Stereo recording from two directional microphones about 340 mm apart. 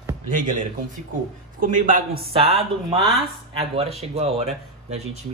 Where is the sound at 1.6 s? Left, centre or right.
Right.